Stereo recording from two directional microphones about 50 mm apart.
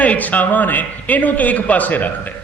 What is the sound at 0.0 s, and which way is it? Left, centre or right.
A man's voice, left.